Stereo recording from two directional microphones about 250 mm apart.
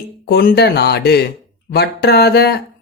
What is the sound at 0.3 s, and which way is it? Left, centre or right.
Speech, left.